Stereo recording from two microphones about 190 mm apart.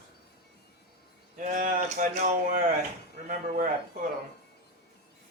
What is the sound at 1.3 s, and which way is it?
Speech, 45° right (ahead or behind).